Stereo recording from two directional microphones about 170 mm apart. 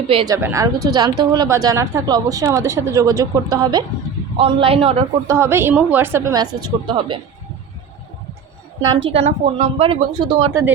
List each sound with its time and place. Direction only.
0.1 s speech: 30° right (ahead or behind)
0.4 s a woman's voice: 20° right (ahead or behind)
5.3 s a woman's voice: 15° right (ahead or behind)
8.9 s speech: 35° right (ahead or behind)